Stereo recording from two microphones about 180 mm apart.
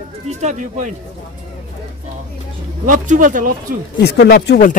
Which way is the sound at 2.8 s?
45° right (ahead or behind).